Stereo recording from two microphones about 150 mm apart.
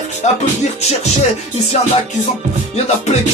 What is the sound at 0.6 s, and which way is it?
Music, 45° left (ahead or behind).